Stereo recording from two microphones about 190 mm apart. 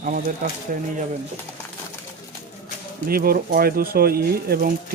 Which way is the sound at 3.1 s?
50° right (ahead or behind).